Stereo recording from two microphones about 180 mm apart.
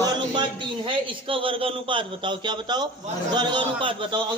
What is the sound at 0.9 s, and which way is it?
A man's voice, 30° right (ahead or behind).